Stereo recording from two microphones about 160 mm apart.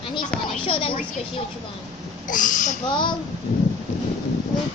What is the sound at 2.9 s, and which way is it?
Speech, 30° left (ahead or behind).